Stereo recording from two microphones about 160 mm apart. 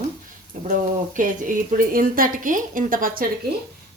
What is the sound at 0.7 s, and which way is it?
A woman's voice, 55° right (ahead or behind).